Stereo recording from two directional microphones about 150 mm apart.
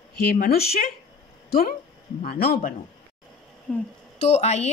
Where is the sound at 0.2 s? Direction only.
85° left.